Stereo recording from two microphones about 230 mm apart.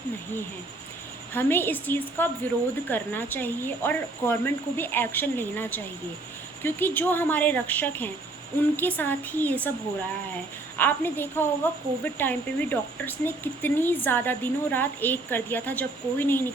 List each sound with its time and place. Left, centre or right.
1.3 s a woman's voice: centre
10.8 s a woman's voice: centre